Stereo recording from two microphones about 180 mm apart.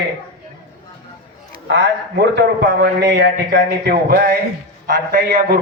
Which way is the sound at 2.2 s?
70° right (ahead or behind).